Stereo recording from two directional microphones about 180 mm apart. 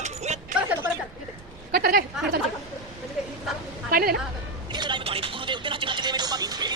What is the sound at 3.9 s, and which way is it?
Music, 55° right (ahead or behind).